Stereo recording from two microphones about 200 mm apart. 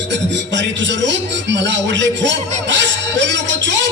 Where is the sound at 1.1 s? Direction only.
65° right (ahead or behind).